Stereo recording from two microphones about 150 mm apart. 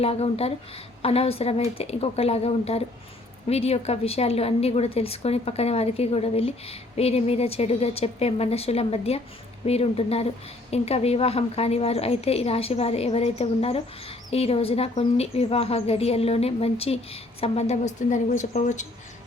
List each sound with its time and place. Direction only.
0.0 s a woman's voice: 40° left (ahead or behind)